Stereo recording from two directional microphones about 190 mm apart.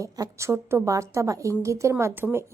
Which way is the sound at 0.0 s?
15° right (ahead or behind).